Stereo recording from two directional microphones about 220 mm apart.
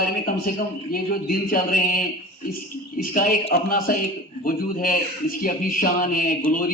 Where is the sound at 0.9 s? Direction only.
40° left (ahead or behind).